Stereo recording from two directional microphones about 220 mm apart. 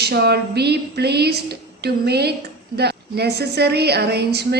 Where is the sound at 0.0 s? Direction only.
50° right (ahead or behind).